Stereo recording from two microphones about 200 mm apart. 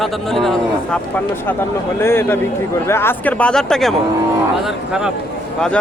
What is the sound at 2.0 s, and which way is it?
Speech, 10° left (ahead or behind).